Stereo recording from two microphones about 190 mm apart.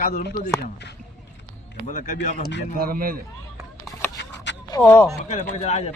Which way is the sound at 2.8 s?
50° right (ahead or behind).